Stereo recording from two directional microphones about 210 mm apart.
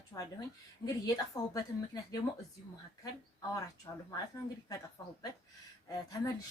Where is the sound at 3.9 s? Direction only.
15° left (ahead or behind).